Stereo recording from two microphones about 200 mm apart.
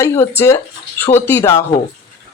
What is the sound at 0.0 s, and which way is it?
Speech, 10° left (ahead or behind).